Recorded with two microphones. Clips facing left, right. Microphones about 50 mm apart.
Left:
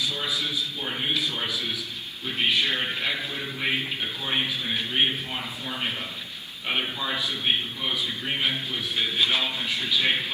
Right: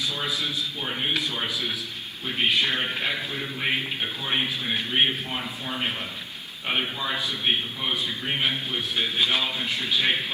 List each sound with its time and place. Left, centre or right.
0.3 s a man's voice: right
0.9 s speech: centre
1.5 s speech: right
3.6 s a man's voice: centre
8.3 s a man's voice: centre
9.6 s a man's voice: right